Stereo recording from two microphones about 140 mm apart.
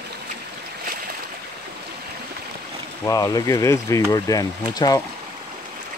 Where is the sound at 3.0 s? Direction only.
25° left (ahead or behind).